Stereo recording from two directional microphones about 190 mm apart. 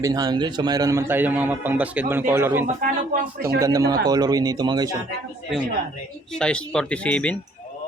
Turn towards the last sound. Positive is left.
turn(degrees=5)  # may be behind; listen again after turning